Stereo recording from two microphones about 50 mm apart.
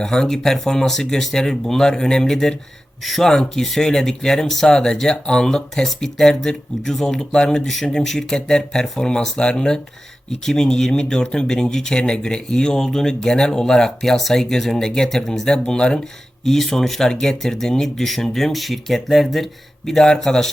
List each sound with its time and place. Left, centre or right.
0.0 s speech: centre
16.4 s speech: centre